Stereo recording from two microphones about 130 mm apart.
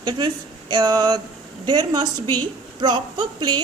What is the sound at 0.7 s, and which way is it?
A woman's voice, 35° right (ahead or behind).